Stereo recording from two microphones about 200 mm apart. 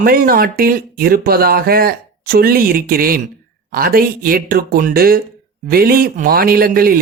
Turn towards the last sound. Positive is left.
turn(degrees=-45)  # may be behind; listen again after turning